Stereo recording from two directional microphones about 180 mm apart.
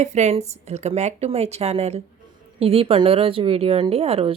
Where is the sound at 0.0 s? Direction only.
40° right (ahead or behind).